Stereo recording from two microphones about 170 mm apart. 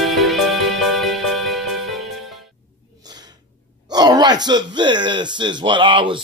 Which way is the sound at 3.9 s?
25° right (ahead or behind).